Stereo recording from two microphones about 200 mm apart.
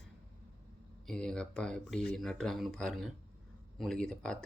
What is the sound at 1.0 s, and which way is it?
Speech, 5° left (ahead or behind).